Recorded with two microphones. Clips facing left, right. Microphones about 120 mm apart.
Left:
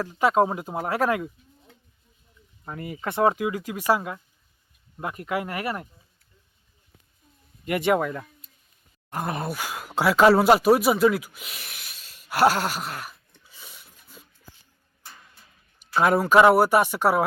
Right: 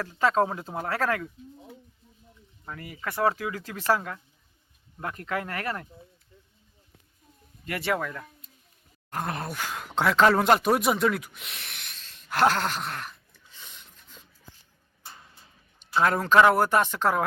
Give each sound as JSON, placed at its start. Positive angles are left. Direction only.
{"t": 0.0, "sound": "speech", "side_deg": 15}
{"t": 2.6, "sound": "speech", "side_deg": 25}
{"t": 7.6, "sound": "speech", "side_deg": 15}
{"t": 9.0, "sound": "speech", "side_deg": 5}
{"t": 13.4, "sound": "a sound", "side_deg": 5}
{"t": 16.0, "sound": "speech", "side_deg": 10}